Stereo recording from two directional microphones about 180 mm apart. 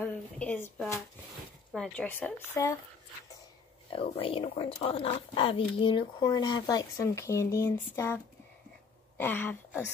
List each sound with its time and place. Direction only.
0.0 s speech: 10° left (ahead or behind)
1.7 s speech: 5° left (ahead or behind)
3.9 s speech: 30° left (ahead or behind); by 8.2 s 15° left (ahead or behind)
9.2 s speech: 10° left (ahead or behind)